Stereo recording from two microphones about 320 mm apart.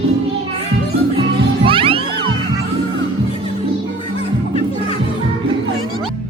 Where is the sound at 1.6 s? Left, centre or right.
Centre.